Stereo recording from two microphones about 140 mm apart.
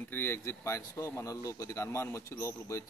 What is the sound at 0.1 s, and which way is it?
Speech, 15° left (ahead or behind).